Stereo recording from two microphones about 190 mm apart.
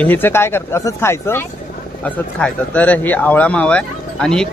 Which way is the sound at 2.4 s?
10° left (ahead or behind).